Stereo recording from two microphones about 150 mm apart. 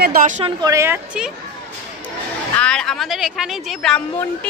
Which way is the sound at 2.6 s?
5° left (ahead or behind).